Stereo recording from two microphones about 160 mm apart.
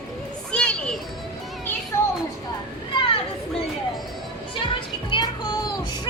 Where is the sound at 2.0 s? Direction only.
15° left (ahead or behind).